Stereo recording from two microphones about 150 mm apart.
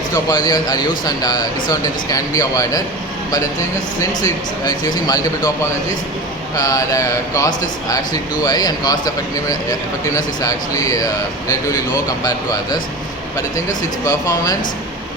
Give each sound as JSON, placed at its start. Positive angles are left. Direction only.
{"t": 0.1, "sound": "a man's voice", "side_deg": 25}
{"t": 4.0, "sound": "a man's voice", "side_deg": 25}
{"t": 6.6, "sound": "a man's voice", "side_deg": 25}
{"t": 14.0, "sound": "a man's voice", "side_deg": 25}